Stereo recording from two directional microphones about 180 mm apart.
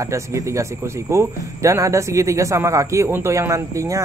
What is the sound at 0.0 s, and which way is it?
Speech, 15° right (ahead or behind).